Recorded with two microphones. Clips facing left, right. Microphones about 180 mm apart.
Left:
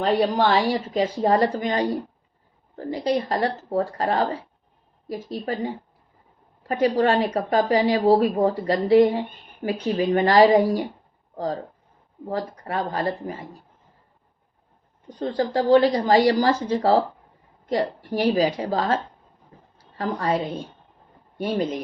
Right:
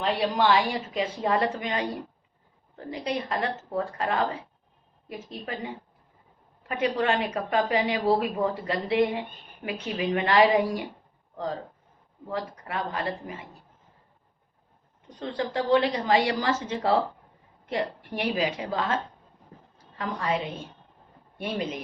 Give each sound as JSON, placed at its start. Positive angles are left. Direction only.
{"t": 0.0, "sound": "speech", "side_deg": 40}
{"t": 15.2, "sound": "speech", "side_deg": 35}
{"t": 20.0, "sound": "speech", "side_deg": 35}